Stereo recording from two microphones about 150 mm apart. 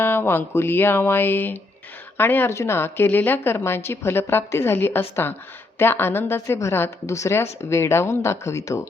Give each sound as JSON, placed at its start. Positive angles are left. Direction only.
{"t": 0.0, "sound": "speech", "side_deg": 15}